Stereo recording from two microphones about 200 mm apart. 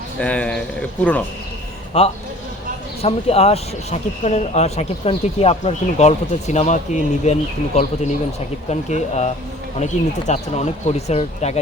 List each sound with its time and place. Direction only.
0.2 s speech: 5° left (ahead or behind)
1.9 s speech: 30° left (ahead or behind)